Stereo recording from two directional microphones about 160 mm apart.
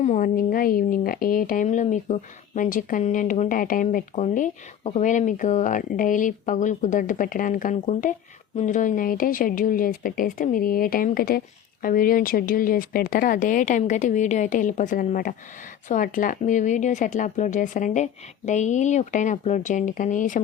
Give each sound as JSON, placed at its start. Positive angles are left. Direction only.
{"t": 0.0, "sound": "a woman's voice", "side_deg": 50}